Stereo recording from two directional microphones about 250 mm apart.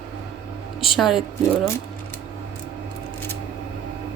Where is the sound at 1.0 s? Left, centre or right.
Centre.